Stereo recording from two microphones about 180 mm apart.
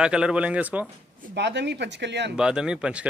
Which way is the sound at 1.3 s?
70° right (ahead or behind).